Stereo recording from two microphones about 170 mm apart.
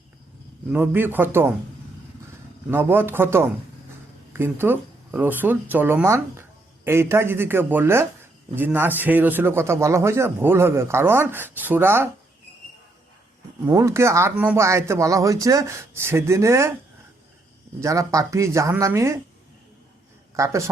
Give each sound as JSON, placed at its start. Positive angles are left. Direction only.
{"t": 0.7, "sound": "a man's voice", "side_deg": -10}
{"t": 2.6, "sound": "a man's voice", "side_deg": -15}
{"t": 13.7, "sound": "a man's voice", "side_deg": -15}
{"t": 17.7, "sound": "a man's voice", "side_deg": -20}
{"t": 20.3, "sound": "a man's voice", "side_deg": -20}